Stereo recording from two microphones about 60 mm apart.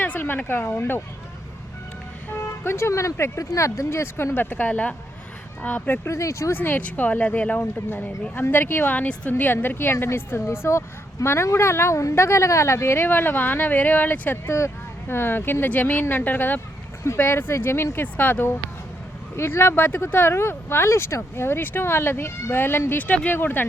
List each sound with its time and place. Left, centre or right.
0.0 s speech: left
2.6 s speech: left
4.4 s speech: left
6.1 s speech: left
6.5 s speech: left
17.9 s speech: left
19.4 s speech: left